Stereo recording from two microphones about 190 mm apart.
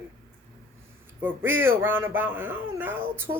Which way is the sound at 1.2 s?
10° right (ahead or behind).